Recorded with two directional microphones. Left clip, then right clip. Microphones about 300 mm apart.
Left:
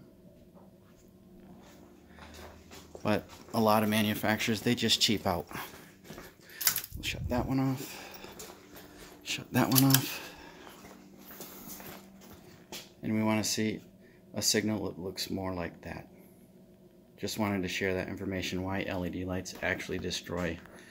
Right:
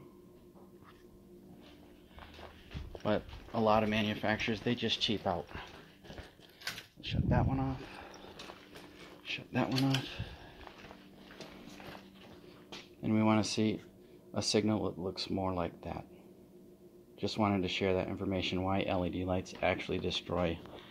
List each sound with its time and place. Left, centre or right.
3.0 s speech: centre
7.0 s speech: centre
9.2 s a sound: centre
9.8 s speech: left
13.0 s speech: centre
17.2 s speech: centre